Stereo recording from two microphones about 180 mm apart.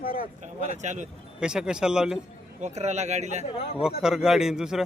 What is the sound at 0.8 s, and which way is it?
Speech, 45° right (ahead or behind).